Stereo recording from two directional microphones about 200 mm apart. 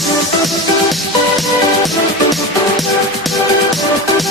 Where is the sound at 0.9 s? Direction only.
Centre (ahead or behind).